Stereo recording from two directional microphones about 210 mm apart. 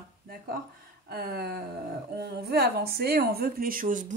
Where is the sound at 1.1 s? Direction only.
50° right (ahead or behind).